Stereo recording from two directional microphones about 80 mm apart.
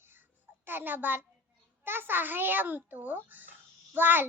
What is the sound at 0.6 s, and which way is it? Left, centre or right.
A child's voice, right.